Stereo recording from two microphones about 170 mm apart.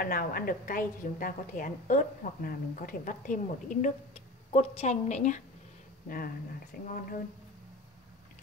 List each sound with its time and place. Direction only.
0.0 s a woman's voice: 60° left (ahead or behind)
4.5 s a woman's voice: 40° left (ahead or behind)
6.0 s a woman's voice: 55° left (ahead or behind)